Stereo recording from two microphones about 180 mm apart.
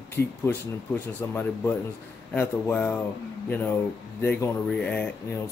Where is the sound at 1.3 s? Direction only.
10° left (ahead or behind).